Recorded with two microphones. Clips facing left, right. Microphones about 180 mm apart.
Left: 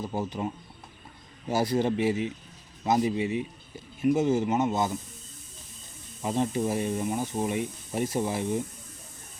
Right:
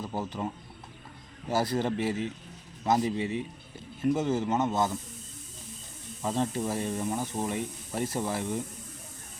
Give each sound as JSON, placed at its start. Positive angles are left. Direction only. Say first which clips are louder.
{"t": 0.0, "sound": "speech", "louder": "left 2 dB", "side_deg": 10}
{"t": 6.2, "sound": "speech", "louder": "left 2 dB", "side_deg": 15}